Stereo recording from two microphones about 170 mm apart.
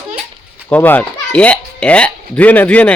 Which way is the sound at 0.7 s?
10° left (ahead or behind).